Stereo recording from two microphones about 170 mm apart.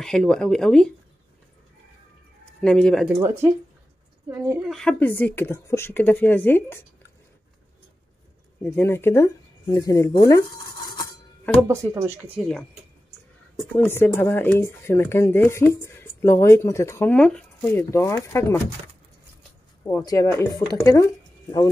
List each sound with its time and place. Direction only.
0.0 s speech: 5° left (ahead or behind)
2.6 s speech: 5° left (ahead or behind)
3.2 s speech: 15° right (ahead or behind)
4.6 s speech: centre (ahead or behind)
8.6 s speech: 15° left (ahead or behind)
11.6 s speech: 15° right (ahead or behind)
13.7 s speech: 10° left (ahead or behind)
17.9 s speech: 15° left (ahead or behind)
19.8 s speech: 10° left (ahead or behind)